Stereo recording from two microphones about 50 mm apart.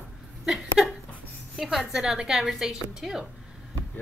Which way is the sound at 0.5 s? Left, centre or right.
Centre.